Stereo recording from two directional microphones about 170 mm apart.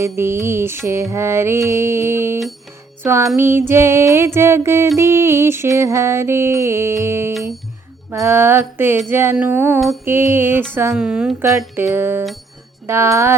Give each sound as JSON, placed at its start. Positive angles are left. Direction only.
{"t": 0.0, "sound": "music", "side_deg": -15}
{"t": 10.7, "sound": "a woman's voice", "side_deg": -15}
{"t": 11.9, "sound": "music", "side_deg": -10}